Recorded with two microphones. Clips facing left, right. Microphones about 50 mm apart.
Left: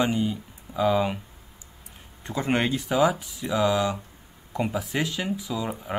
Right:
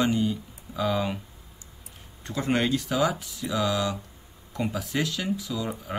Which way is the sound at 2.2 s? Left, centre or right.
Left.